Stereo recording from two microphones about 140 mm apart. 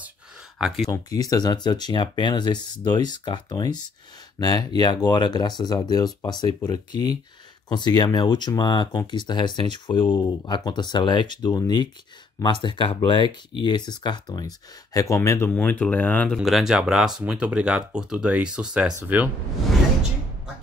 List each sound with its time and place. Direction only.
0.6 s speech: centre (ahead or behind)
1.1 s speech: 25° left (ahead or behind)
15.0 s speech: 20° left (ahead or behind)
16.3 s speech: 5° right (ahead or behind)